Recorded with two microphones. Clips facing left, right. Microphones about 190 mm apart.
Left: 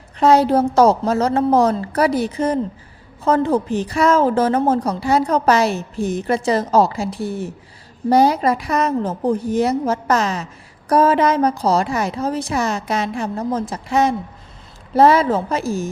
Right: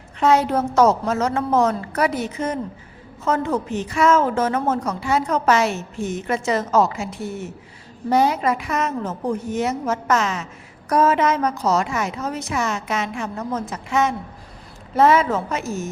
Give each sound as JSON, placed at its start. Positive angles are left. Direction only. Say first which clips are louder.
{"t": 0.2, "sound": "a woman's voice", "louder": "left 4 dB", "side_deg": 35}